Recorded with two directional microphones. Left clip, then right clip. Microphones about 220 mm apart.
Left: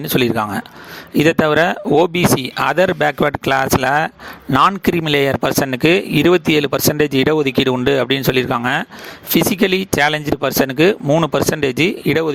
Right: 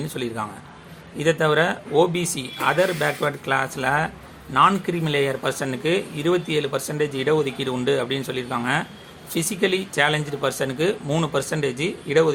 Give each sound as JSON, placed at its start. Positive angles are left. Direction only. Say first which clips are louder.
{"t": 0.1, "sound": "speech", "louder": "left 12 dB", "side_deg": 45}